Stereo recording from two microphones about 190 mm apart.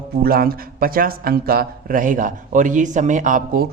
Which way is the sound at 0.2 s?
50° right (ahead or behind).